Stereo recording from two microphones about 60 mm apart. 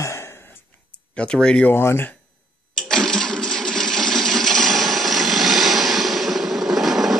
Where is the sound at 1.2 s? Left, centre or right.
Centre.